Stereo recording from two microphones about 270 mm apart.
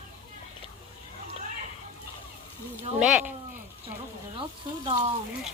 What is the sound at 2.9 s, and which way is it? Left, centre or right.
Speech, centre.